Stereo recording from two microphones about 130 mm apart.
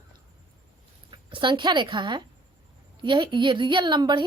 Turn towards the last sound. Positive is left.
turn(degrees=-35)  # may be behind; listen again after turning